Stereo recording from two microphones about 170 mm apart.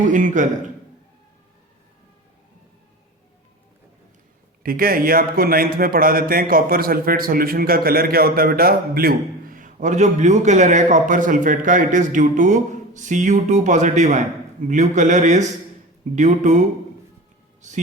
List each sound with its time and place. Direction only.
0.1 s speech: 50° right (ahead or behind)
4.6 s speech: 60° right (ahead or behind)